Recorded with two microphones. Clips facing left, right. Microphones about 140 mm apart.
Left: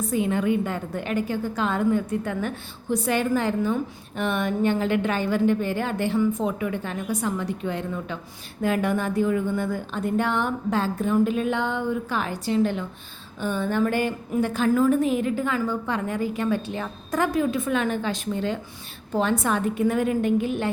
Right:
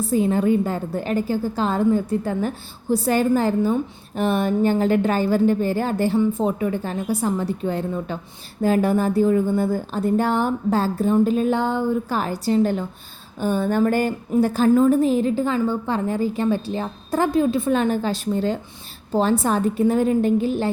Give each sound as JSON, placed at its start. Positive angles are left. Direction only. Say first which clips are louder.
{"t": 0.0, "sound": "a woman's voice", "louder": "right 4 dB", "side_deg": -35}